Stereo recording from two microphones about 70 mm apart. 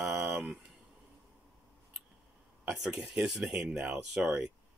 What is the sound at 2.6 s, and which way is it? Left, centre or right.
Speech, centre.